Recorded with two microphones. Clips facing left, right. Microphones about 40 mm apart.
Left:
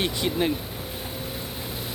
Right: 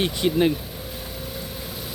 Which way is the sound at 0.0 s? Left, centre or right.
Centre.